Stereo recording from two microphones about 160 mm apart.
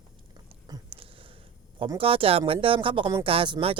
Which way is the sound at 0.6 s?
30° right (ahead or behind).